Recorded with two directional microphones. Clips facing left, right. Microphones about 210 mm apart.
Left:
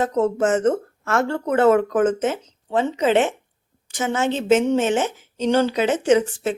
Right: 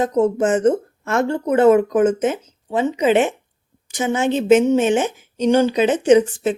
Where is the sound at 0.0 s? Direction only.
15° right (ahead or behind).